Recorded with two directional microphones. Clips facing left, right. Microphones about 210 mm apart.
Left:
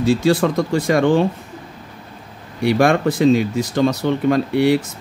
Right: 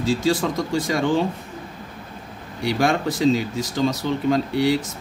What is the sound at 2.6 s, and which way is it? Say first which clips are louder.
Speech: left 6 dB; 60° left (ahead or behind).